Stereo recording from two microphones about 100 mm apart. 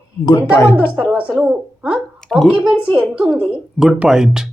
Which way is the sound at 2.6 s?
15° right (ahead or behind).